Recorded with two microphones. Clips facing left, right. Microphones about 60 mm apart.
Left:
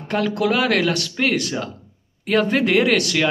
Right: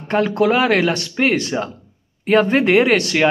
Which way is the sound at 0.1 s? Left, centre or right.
Right.